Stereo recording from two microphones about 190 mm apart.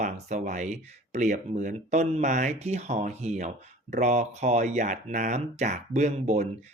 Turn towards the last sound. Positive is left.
turn(degrees=-35)  # may be behind; listen again after turning